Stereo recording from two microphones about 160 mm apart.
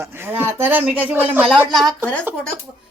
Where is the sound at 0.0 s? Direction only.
15° right (ahead or behind).